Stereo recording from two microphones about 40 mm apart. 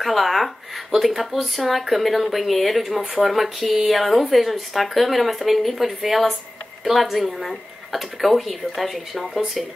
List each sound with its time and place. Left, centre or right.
0.0 s speech: centre